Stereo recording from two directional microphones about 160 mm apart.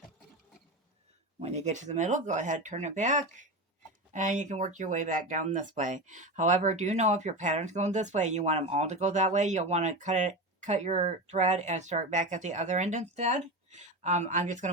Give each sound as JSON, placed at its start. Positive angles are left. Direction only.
{"t": 1.4, "sound": "speech", "side_deg": -40}